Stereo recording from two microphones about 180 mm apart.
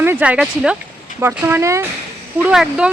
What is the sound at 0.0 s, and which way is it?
Speech, 10° right (ahead or behind).